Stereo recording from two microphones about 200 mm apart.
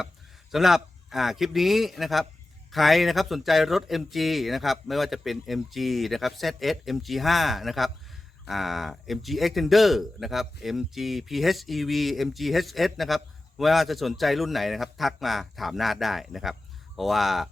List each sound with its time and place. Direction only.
0.5 s speech: centre (ahead or behind)